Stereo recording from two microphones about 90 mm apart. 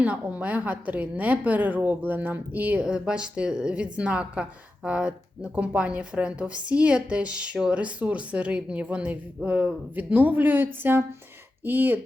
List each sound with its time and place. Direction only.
0.0 s speech: 15° right (ahead or behind)